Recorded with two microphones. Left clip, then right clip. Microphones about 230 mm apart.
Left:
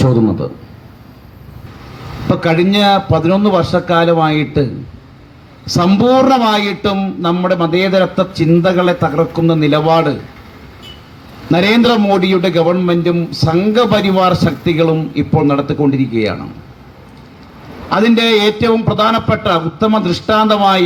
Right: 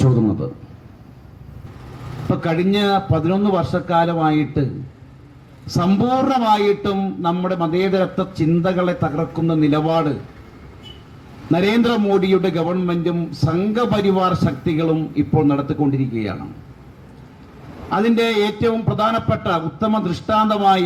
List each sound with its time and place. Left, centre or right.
2.3 s a man's voice: left
5.6 s a man's voice: left
11.5 s a man's voice: left
17.8 s a man's voice: left